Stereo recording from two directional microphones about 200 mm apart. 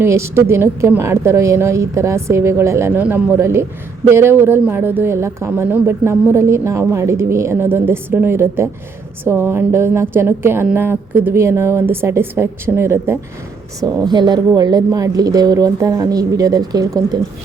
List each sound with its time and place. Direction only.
0.0 s a woman's voice: 10° right (ahead or behind)